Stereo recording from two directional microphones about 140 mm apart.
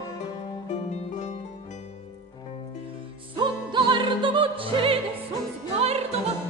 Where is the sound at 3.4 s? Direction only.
35° right (ahead or behind).